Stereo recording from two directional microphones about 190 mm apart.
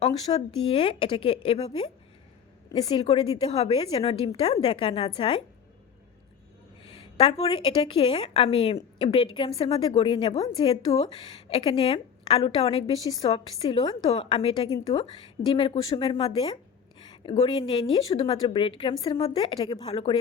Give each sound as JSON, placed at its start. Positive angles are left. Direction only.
{"t": 0.1, "sound": "a woman's voice", "side_deg": 20}
{"t": 6.8, "sound": "a woman's voice", "side_deg": 25}